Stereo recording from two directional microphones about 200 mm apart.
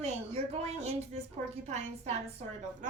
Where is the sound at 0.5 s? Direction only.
30° right (ahead or behind).